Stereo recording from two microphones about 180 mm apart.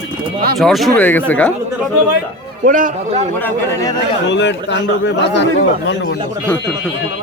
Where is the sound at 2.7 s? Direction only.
45° right (ahead or behind).